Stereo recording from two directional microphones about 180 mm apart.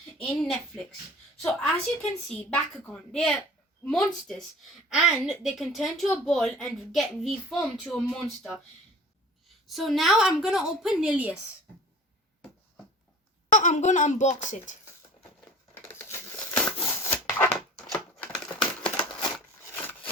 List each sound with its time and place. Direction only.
1.4 s a woman's voice: centre (ahead or behind)
9.6 s a woman's voice: centre (ahead or behind)
13.5 s speech: 45° left (ahead or behind)
15.7 s scissors: 15° left (ahead or behind)
17.9 s typewriter: 5° left (ahead or behind)
19.7 s a sound: 10° left (ahead or behind)